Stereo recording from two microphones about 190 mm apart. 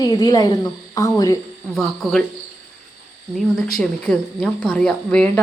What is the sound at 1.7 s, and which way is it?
Speech, centre (ahead or behind).